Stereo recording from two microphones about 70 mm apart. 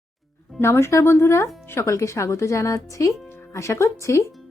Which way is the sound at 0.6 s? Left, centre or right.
Left.